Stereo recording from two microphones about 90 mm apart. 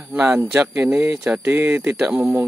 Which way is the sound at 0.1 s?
15° right (ahead or behind).